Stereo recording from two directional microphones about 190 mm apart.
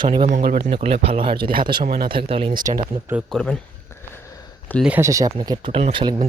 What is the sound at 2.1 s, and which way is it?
Speech, 30° right (ahead or behind).